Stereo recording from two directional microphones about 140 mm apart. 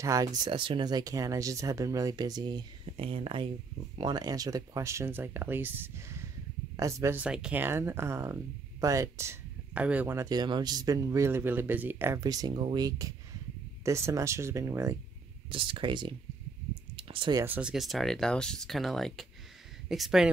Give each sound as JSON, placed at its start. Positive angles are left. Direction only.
{"t": 0.0, "sound": "speech", "side_deg": -25}
{"t": 4.0, "sound": "speech", "side_deg": -30}
{"t": 7.2, "sound": "speech", "side_deg": -5}
{"t": 15.5, "sound": "speech", "side_deg": -40}
{"t": 16.9, "sound": "a sound", "side_deg": -35}
{"t": 17.5, "sound": "speech", "side_deg": -5}